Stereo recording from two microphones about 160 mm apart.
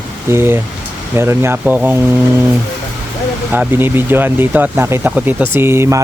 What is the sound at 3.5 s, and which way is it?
Speech, 10° right (ahead or behind).